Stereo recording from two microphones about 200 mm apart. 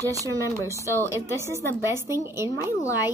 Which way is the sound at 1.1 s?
15° right (ahead or behind).